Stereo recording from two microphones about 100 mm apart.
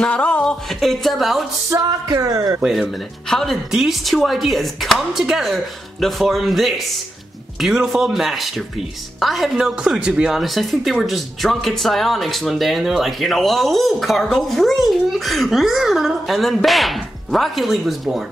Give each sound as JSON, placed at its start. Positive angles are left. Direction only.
{"t": 0.0, "sound": "a woman's voice", "side_deg": 15}
{"t": 1.8, "sound": "speech", "side_deg": -40}
{"t": 2.6, "sound": "a woman's voice", "side_deg": -5}